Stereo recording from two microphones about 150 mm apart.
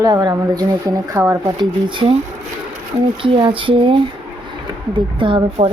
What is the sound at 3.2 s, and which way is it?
Speech, 35° right (ahead or behind).